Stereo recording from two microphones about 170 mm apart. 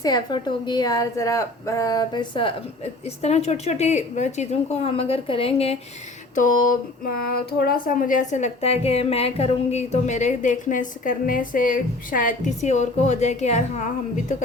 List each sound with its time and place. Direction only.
0.0 s a woman's voice: 25° left (ahead or behind)
6.3 s a woman's voice: 50° left (ahead or behind)